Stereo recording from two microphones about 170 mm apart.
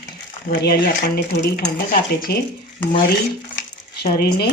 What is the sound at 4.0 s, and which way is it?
Speech, 60° left (ahead or behind).